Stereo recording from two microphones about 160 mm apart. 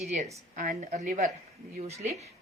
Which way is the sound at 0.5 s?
55° right (ahead or behind).